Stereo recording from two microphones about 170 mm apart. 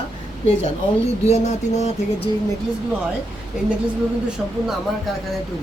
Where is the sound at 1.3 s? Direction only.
40° left (ahead or behind).